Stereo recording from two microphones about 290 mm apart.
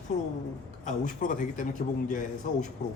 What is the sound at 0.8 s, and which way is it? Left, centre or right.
A man's voice, left.